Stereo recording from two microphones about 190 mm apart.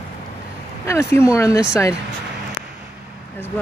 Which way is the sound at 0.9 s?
15° left (ahead or behind).